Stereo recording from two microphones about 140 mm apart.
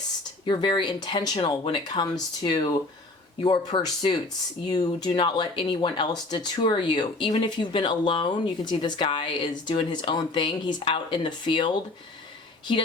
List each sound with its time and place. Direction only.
0.4 s speech: 35° left (ahead or behind)